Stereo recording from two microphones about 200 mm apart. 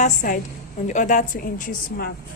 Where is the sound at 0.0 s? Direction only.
40° left (ahead or behind).